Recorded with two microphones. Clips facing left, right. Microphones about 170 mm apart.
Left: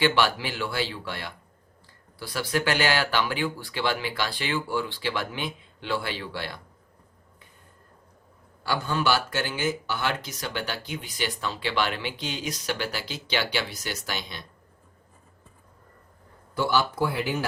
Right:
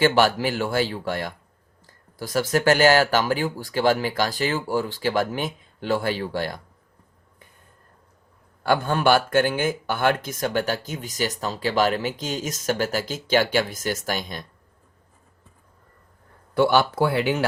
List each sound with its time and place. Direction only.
0.0 s speech: 45° right (ahead or behind)
8.6 s speech: 55° right (ahead or behind)
16.6 s speech: 65° right (ahead or behind)